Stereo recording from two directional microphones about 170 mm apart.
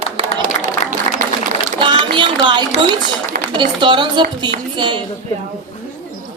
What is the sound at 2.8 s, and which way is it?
A woman's voice, 30° right (ahead or behind).